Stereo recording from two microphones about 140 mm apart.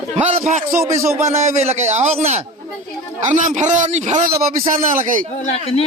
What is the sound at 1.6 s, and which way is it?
A man's voice, 50° right (ahead or behind).